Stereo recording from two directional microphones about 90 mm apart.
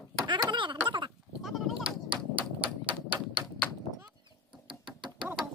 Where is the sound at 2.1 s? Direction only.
15° right (ahead or behind).